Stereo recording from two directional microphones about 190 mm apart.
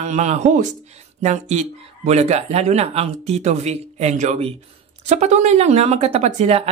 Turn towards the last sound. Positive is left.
turn(degrees=-35)  # may be behind; listen again after turning